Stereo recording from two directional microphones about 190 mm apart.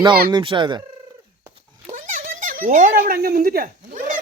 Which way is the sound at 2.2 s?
45° right (ahead or behind).